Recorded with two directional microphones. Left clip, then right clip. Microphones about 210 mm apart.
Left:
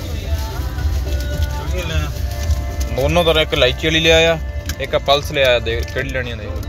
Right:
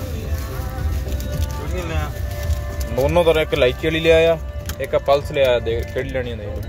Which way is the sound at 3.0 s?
10° right (ahead or behind).